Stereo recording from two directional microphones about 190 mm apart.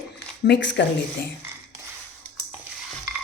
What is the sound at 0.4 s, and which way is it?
Speech, 70° left (ahead or behind).